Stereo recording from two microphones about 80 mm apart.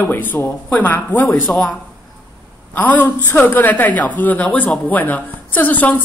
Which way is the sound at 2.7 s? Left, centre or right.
Left.